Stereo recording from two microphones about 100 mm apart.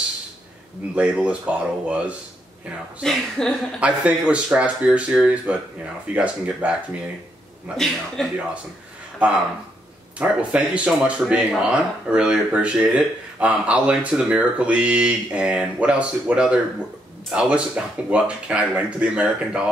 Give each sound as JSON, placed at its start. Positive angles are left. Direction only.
{"t": 0.9, "sound": "speech", "side_deg": -10}
{"t": 3.0, "sound": "speech", "side_deg": 5}
{"t": 3.8, "sound": "speech", "side_deg": -10}
{"t": 7.7, "sound": "speech", "side_deg": 5}
{"t": 10.1, "sound": "speech", "side_deg": -10}